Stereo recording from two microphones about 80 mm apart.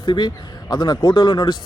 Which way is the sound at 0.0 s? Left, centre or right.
Left.